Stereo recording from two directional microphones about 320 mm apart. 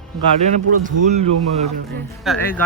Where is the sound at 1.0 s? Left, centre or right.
Right.